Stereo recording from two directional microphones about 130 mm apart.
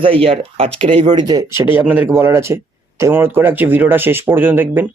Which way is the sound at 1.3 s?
25° right (ahead or behind).